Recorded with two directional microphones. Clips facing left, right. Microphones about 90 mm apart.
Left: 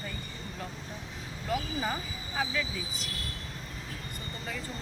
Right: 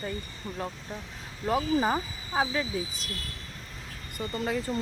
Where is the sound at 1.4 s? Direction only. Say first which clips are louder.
Right 7 dB; 40° right (ahead or behind).